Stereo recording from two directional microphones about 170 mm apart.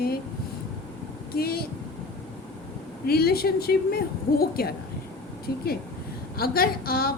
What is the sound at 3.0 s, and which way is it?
A woman's voice, 65° left (ahead or behind).